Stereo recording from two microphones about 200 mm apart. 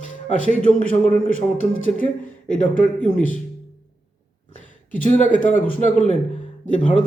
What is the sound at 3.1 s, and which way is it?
Speech, 40° left (ahead or behind).